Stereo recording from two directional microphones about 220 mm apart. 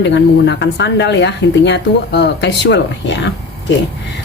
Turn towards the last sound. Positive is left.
turn(degrees=50)  # may be behind; listen again after turning